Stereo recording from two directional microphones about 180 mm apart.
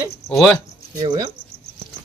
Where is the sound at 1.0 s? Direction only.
20° right (ahead or behind).